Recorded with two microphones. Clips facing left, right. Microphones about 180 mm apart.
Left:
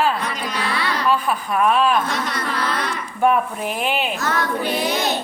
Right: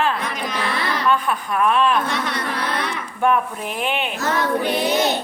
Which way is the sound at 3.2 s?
5° left (ahead or behind).